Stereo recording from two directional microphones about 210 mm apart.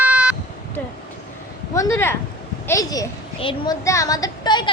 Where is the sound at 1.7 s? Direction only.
15° left (ahead or behind).